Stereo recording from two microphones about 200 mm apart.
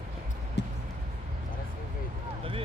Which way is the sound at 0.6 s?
60° left (ahead or behind).